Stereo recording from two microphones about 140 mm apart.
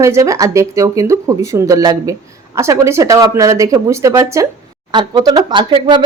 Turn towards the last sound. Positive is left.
turn(degrees=-35)  # may be behind; listen again after turning